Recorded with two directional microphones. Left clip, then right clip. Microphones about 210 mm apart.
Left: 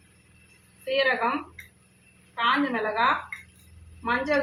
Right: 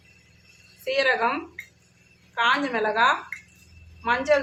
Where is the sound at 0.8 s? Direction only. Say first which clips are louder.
Right 2 dB; 60° right (ahead or behind).